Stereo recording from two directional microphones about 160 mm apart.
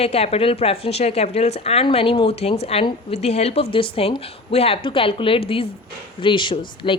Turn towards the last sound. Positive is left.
turn(degrees=30)  # may be behind; listen again after turning